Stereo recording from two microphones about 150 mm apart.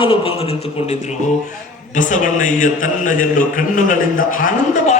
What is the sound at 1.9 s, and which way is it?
A man's voice, 60° left (ahead or behind).